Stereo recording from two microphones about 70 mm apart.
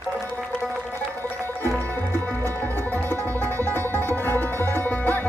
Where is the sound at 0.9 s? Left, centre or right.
Left.